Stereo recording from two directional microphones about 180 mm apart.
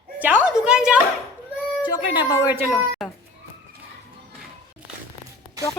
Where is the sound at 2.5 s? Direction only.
10° right (ahead or behind).